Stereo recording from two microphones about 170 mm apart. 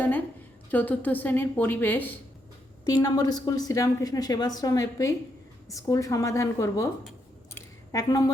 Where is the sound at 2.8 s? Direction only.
20° left (ahead or behind).